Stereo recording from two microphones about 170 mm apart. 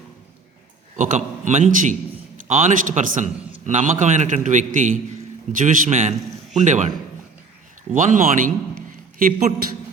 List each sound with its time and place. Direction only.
0.9 s a man's voice: 45° right (ahead or behind)
7.9 s a man's voice: 50° right (ahead or behind)